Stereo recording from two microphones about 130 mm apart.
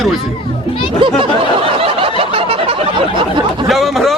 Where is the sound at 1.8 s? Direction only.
50° right (ahead or behind).